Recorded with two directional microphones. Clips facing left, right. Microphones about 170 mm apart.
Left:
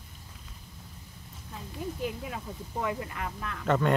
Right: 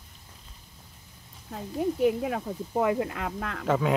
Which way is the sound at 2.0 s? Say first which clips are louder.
Right 12 dB; 70° right (ahead or behind).